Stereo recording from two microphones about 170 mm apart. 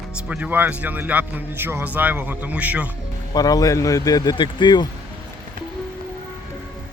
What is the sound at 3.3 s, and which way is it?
Speech, 20° left (ahead or behind).